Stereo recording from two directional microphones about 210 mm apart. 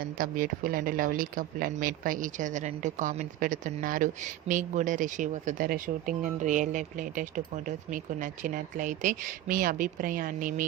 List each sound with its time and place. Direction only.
0.0 s speech: 40° right (ahead or behind)